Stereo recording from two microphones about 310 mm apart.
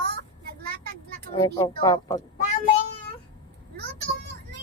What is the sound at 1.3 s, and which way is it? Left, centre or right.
Speech, centre.